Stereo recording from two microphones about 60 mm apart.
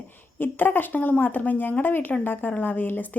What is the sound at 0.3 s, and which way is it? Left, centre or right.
Speech, left.